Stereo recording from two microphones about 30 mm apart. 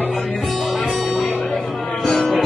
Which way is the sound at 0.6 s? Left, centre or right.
Centre.